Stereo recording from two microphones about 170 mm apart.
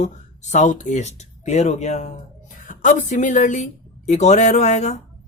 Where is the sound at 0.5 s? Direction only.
45° left (ahead or behind).